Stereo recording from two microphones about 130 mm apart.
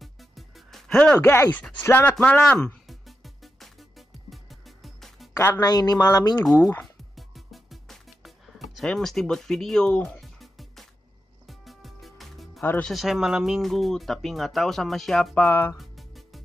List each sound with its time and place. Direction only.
0.0 s music: centre (ahead or behind)
5.3 s speech: 20° left (ahead or behind)
7.2 s music: centre (ahead or behind)
12.6 s speech: 15° left (ahead or behind)
12.9 s speech: centre (ahead or behind)
15.4 s speech: 15° left (ahead or behind)
15.8 s music: centre (ahead or behind)